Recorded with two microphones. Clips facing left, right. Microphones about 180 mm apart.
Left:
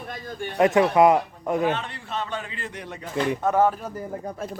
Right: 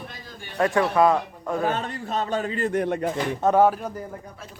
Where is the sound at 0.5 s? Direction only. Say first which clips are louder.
Left 3 dB; 20° left (ahead or behind).